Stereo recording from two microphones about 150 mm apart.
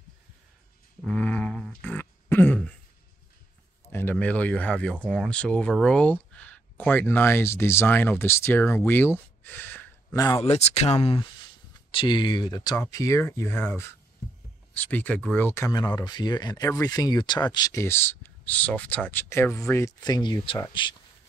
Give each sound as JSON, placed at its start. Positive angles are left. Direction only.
{"t": 1.0, "sound": "a sound", "side_deg": 10}
{"t": 3.9, "sound": "speech", "side_deg": 10}
{"t": 10.1, "sound": "speech", "side_deg": 25}
{"t": 10.4, "sound": "speech", "side_deg": 45}